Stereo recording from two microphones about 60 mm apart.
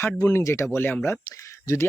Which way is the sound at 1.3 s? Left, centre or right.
Left.